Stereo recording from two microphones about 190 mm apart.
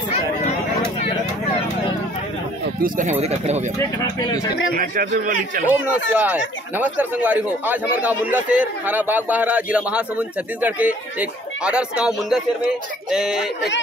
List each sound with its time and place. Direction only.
2.8 s speech: 40° right (ahead or behind)
3.7 s speech: 20° left (ahead or behind)
4.7 s a man's voice: 50° right (ahead or behind)
6.1 s speech: 10° right (ahead or behind)